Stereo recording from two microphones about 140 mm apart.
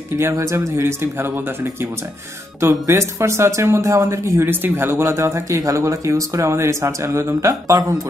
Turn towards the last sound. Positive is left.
turn(degrees=-25)  # may be behind; listen again after turning